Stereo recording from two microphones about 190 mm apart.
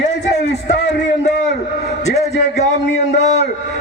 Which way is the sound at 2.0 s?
35° left (ahead or behind).